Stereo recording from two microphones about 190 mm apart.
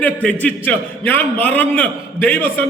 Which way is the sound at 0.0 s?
10° left (ahead or behind).